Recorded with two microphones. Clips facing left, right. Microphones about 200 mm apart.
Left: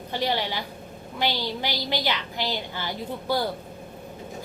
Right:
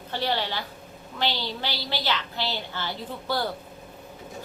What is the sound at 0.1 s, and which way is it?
A woman's voice, 15° left (ahead or behind).